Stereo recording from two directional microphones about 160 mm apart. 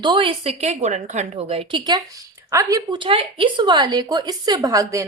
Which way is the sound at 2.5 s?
20° right (ahead or behind).